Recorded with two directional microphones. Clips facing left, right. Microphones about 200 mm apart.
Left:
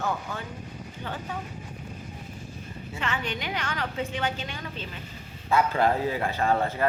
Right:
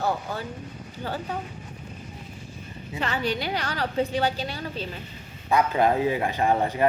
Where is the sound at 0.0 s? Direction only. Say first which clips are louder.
Right 3 dB; 35° right (ahead or behind).